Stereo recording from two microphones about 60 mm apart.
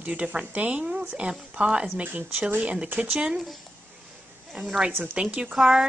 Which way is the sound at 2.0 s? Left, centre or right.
Right.